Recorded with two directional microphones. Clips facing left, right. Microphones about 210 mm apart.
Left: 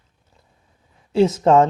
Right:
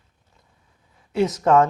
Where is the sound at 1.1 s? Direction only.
25° left (ahead or behind).